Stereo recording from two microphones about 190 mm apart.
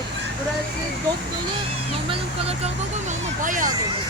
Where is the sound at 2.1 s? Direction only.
30° right (ahead or behind).